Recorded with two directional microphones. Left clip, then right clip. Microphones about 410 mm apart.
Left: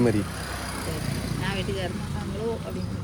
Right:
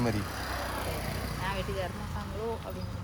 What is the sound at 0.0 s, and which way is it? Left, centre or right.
Vehicle, right.